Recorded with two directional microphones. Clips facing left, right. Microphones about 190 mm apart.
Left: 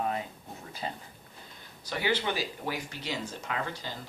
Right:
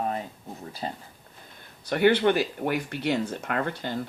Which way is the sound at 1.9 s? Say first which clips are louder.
Right 10 dB; 60° right (ahead or behind).